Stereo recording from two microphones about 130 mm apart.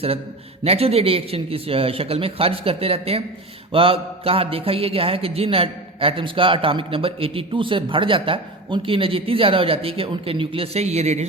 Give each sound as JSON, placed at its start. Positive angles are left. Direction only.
{"t": 0.6, "sound": "a man's voice", "side_deg": -50}